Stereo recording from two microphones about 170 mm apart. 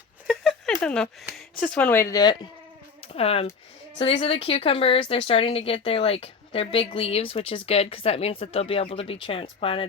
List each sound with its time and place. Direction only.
0.3 s a sound: centre (ahead or behind)
1.5 s speech: 5° left (ahead or behind); by 2.5 s 25° left (ahead or behind)
3.1 s speech: 35° left (ahead or behind)